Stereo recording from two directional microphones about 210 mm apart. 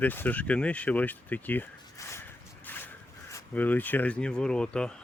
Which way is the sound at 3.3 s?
10° left (ahead or behind).